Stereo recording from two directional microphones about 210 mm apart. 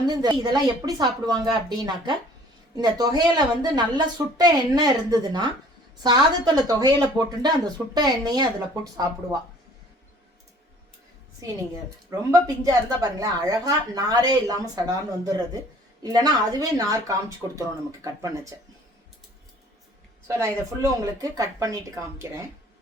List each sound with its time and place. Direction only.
0.0 s speech: 20° right (ahead or behind)
12.3 s a woman's voice: 15° right (ahead or behind)
20.2 s a woman's voice: 15° right (ahead or behind)